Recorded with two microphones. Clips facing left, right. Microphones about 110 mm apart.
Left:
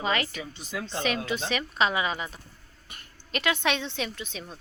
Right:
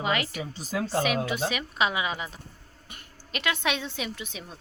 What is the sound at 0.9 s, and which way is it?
Speech, 10° right (ahead or behind).